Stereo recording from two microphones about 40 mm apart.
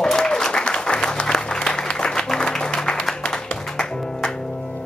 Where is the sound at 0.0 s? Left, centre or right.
Centre.